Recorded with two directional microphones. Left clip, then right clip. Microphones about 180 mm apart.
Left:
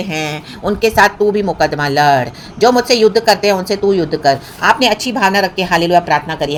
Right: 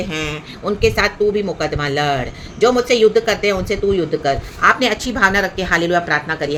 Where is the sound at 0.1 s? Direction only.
25° left (ahead or behind).